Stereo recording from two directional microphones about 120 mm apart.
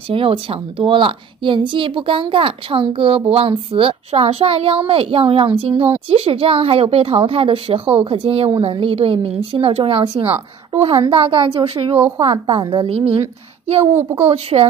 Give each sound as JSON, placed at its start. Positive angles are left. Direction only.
{"t": 0.1, "sound": "a woman's voice", "side_deg": -50}
{"t": 11.1, "sound": "a woman's voice", "side_deg": -50}
{"t": 14.2, "sound": "a woman's voice", "side_deg": -60}